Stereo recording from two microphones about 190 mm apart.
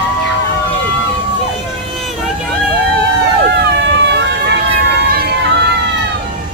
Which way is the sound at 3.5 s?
65° right (ahead or behind).